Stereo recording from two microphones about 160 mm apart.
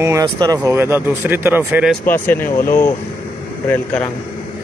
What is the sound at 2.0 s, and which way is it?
Speech, 10° left (ahead or behind).